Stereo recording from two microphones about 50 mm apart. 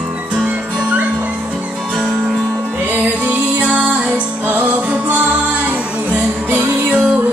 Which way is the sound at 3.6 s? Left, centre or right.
Right.